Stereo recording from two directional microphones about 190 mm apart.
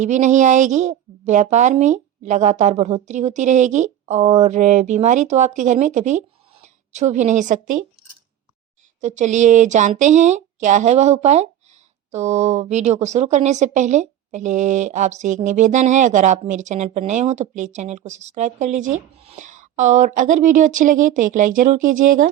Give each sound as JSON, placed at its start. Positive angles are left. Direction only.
{"t": 0.0, "sound": "speech", "side_deg": -40}
{"t": 9.0, "sound": "speech", "side_deg": -40}